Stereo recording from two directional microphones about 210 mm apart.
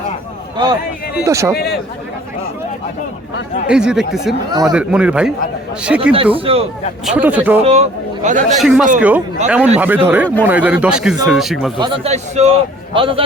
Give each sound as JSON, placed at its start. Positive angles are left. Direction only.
{"t": 1.1, "sound": "speech", "side_deg": -15}
{"t": 1.5, "sound": "speech", "side_deg": 50}
{"t": 3.7, "sound": "a man's voice", "side_deg": -5}
{"t": 6.3, "sound": "a man's voice", "side_deg": -25}
{"t": 7.0, "sound": "speech", "side_deg": -5}
{"t": 7.6, "sound": "speech", "side_deg": -30}
{"t": 8.6, "sound": "a man's voice", "side_deg": -5}
{"t": 11.8, "sound": "a man's voice", "side_deg": -30}